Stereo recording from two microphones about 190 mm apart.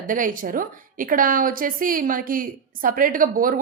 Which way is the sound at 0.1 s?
45° right (ahead or behind).